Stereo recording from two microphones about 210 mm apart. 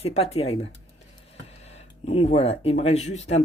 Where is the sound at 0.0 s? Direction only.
30° left (ahead or behind).